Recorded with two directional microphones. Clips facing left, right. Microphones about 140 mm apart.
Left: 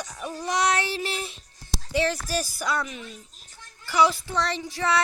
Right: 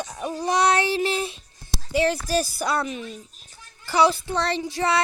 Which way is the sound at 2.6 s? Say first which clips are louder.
Right 3 dB; 30° right (ahead or behind).